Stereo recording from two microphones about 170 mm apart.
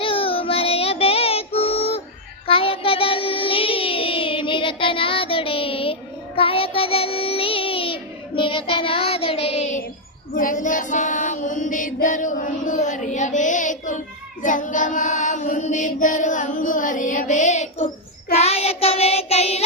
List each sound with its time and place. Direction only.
0.0 s child singing: 30° left (ahead or behind)
10.3 s female singing: 50° left (ahead or behind)
14.4 s mantra: 50° left (ahead or behind)